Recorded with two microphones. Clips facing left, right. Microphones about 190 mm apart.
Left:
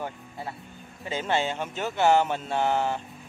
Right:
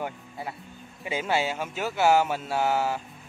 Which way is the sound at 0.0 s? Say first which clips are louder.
Right 1 dB; 20° right (ahead or behind).